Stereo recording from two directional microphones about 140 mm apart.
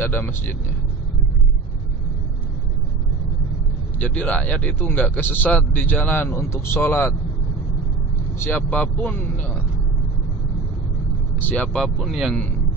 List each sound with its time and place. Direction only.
0.0 s speech: 15° left (ahead or behind)
4.0 s speech: 10° left (ahead or behind)
8.4 s speech: 10° left (ahead or behind)
11.3 s speech: 10° left (ahead or behind)